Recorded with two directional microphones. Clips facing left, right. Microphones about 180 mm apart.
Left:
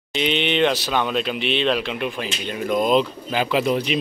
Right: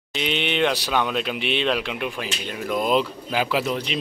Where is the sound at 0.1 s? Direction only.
5° right (ahead or behind).